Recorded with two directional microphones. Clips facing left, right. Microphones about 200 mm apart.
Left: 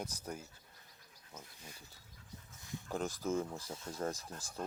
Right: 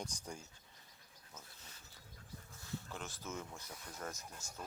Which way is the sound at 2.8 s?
40° left (ahead or behind).